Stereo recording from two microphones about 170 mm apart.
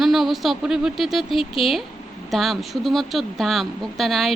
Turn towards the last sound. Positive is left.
turn(degrees=0)  # may be behind; listen again after turning